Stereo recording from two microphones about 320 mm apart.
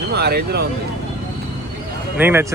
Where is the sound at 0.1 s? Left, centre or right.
Right.